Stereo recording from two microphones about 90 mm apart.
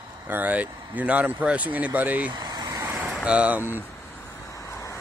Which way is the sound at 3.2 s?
15° right (ahead or behind).